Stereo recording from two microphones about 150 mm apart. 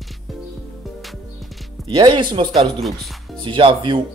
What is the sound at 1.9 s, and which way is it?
Speech, 30° right (ahead or behind).